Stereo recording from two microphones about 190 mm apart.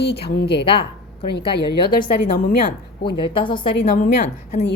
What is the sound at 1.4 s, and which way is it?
Speech, 25° left (ahead or behind).